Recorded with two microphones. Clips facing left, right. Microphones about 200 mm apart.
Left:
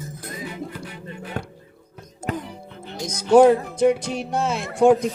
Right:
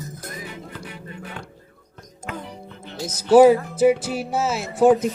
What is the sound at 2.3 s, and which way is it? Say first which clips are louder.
Music: left 5 dB; 35° left (ahead or behind).